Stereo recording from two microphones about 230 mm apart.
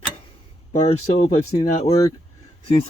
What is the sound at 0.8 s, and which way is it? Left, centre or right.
Speech, left.